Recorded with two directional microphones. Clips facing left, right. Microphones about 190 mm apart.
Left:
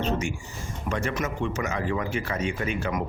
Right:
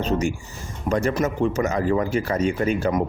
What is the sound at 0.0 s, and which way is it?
Speech, 35° right (ahead or behind).